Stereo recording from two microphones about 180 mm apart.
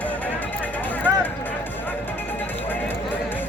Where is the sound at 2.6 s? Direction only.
10° left (ahead or behind).